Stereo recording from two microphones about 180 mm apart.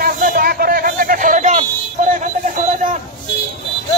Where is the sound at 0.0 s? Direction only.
55° right (ahead or behind).